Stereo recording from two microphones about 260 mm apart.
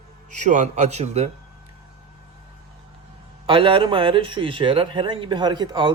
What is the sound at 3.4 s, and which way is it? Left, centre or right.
Speech, centre.